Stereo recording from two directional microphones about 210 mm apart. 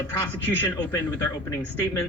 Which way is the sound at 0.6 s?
10° left (ahead or behind).